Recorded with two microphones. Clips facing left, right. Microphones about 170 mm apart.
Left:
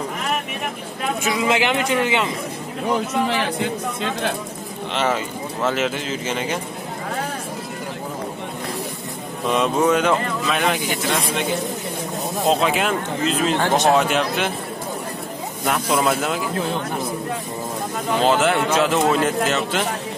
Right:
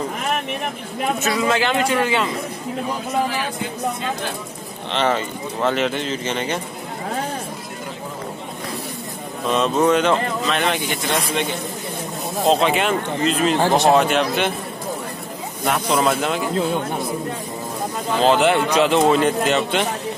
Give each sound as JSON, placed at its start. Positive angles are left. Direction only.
{"t": 1.2, "sound": "speech", "side_deg": 15}
{"t": 2.9, "sound": "speech", "side_deg": 75}
{"t": 4.9, "sound": "speech", "side_deg": 5}
{"t": 9.5, "sound": "speech", "side_deg": 10}
{"t": 13.6, "sound": "speech", "side_deg": -20}
{"t": 13.9, "sound": "speech", "side_deg": 5}
{"t": 16.0, "sound": "speech", "side_deg": 5}
{"t": 18.2, "sound": "speech", "side_deg": 0}